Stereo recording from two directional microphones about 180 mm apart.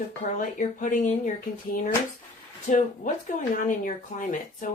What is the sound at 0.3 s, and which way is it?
Speech, 45° left (ahead or behind).